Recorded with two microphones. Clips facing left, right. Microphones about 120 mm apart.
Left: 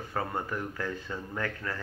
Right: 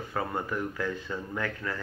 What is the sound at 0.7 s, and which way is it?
Speech, 30° left (ahead or behind).